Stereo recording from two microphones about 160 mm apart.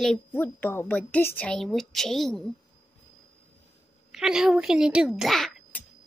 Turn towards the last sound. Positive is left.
turn(degrees=0)  # may be behind; listen again after turning